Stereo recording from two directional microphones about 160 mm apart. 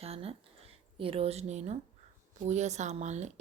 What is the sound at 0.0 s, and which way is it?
Speech, 40° right (ahead or behind).